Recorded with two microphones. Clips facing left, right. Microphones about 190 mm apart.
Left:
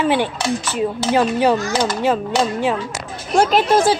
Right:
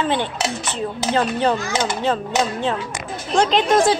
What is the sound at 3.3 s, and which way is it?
Speech, 5° left (ahead or behind).